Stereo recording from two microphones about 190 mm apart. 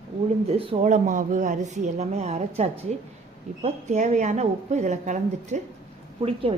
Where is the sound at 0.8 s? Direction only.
40° right (ahead or behind).